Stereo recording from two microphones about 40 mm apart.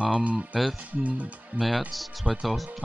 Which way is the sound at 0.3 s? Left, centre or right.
Right.